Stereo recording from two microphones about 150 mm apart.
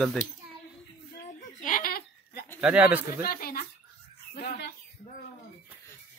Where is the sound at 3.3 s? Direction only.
80° left.